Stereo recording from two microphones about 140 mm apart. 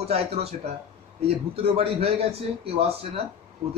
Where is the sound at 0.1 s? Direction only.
45° right (ahead or behind).